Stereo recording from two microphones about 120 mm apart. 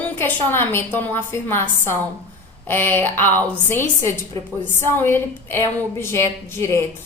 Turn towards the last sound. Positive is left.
turn(degrees=20)  # may be behind; listen again after turning